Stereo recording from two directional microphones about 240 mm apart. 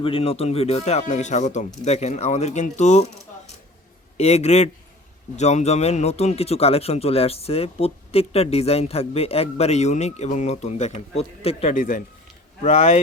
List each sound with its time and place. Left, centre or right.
0.0 s speech: left
4.2 s speech: left